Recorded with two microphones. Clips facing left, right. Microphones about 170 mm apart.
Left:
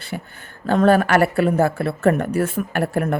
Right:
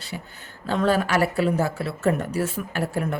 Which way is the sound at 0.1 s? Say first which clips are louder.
Left 5 dB; 55° left (ahead or behind).